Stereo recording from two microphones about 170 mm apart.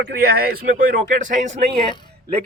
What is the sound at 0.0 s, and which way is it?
Speech, 65° right (ahead or behind).